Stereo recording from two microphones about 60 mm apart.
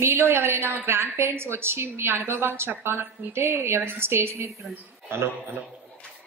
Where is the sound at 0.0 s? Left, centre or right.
Right.